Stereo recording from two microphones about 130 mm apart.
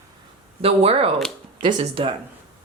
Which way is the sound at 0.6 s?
50° right (ahead or behind).